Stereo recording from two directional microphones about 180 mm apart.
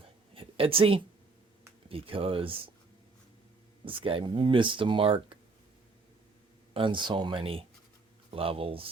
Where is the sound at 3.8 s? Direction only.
30° right (ahead or behind).